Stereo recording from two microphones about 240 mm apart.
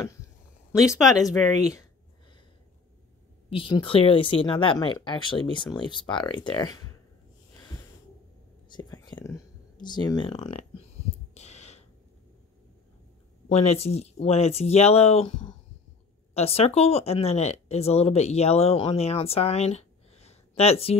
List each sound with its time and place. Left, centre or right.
1.2 s speech: centre
3.4 s speech: left
8.7 s speech: centre
11.3 s a sound: left
13.5 s speech: left
16.3 s speech: left